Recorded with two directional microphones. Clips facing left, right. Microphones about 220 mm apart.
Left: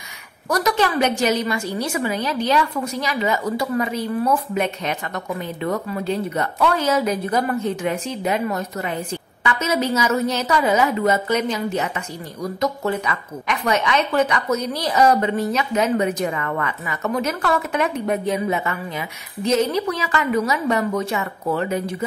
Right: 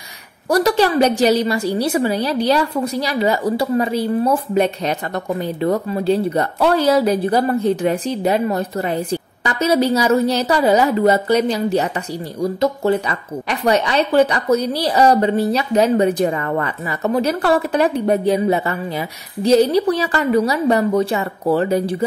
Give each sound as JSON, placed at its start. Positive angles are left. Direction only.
{"t": 0.5, "sound": "a woman's voice", "side_deg": -30}